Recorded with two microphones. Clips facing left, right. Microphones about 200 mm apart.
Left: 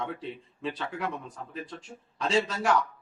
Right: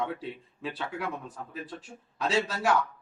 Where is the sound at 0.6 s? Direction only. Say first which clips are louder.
Left 1 dB; 5° right (ahead or behind).